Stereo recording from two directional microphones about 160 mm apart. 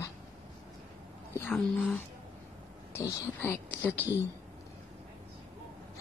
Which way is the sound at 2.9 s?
20° left (ahead or behind).